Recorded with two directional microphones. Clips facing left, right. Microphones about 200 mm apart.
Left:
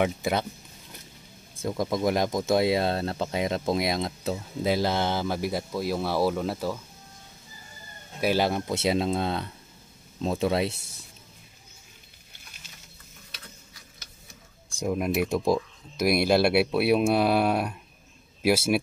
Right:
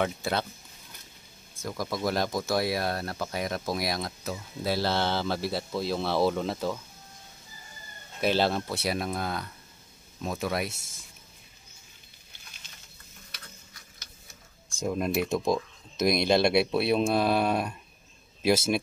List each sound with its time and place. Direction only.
0.0 s speech: 15° left (ahead or behind)
1.6 s speech: 25° left (ahead or behind); by 6.8 s 5° left (ahead or behind)
8.2 s speech: 10° left (ahead or behind); by 10.8 s 25° left (ahead or behind)
14.8 s speech: 10° left (ahead or behind)